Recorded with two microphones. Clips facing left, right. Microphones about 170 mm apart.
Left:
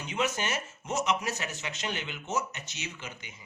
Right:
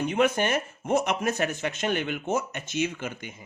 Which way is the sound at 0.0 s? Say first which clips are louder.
Right 8 dB; 55° right (ahead or behind).